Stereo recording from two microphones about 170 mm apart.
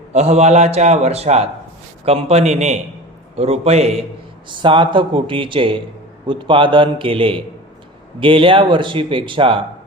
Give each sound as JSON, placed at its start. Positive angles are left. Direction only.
{"t": 0.1, "sound": "a man's voice", "side_deg": -40}